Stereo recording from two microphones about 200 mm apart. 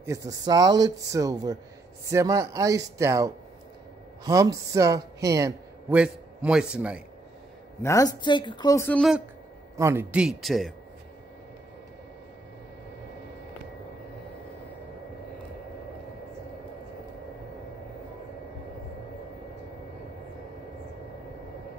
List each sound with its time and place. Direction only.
0.0 s speech: 15° right (ahead or behind)
7.8 s speech: 15° left (ahead or behind)
9.8 s speech: 10° right (ahead or behind)